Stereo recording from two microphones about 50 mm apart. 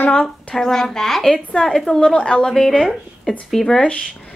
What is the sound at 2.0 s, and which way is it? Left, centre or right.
Speech, centre.